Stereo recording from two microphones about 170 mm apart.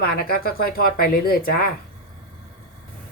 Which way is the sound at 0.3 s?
60° left (ahead or behind).